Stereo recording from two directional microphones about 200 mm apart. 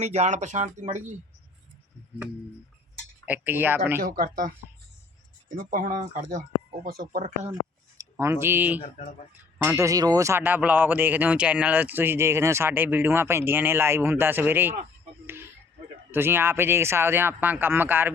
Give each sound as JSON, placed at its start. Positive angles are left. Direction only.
{"t": 0.0, "sound": "speech", "side_deg": -35}
{"t": 3.2, "sound": "speech", "side_deg": -10}
{"t": 4.0, "sound": "speech", "side_deg": -45}
{"t": 5.5, "sound": "speech", "side_deg": -40}
{"t": 8.1, "sound": "speech", "side_deg": -10}
{"t": 8.8, "sound": "speech", "side_deg": 35}
{"t": 9.3, "sound": "speech", "side_deg": -10}
{"t": 16.1, "sound": "speech", "side_deg": -10}